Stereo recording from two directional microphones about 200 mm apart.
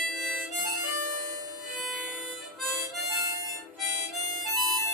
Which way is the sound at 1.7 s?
Centre (ahead or behind).